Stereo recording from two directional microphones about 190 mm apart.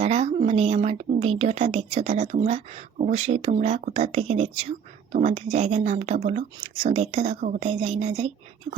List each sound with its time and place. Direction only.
0.0 s speech: 35° right (ahead or behind)